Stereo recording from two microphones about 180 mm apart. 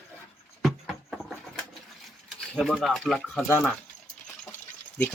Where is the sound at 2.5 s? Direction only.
Centre (ahead or behind).